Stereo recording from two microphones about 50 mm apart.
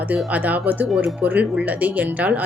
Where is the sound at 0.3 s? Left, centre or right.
Right.